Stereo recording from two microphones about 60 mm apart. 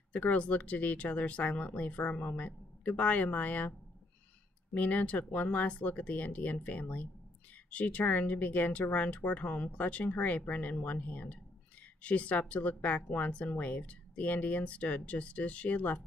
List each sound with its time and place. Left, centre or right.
0.1 s speech: left
4.7 s speech: left